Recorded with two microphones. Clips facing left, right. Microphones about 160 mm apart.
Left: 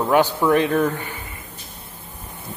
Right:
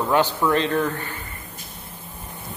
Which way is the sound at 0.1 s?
10° left (ahead or behind).